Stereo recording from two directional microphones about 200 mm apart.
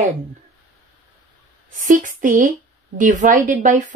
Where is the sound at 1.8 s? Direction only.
40° right (ahead or behind).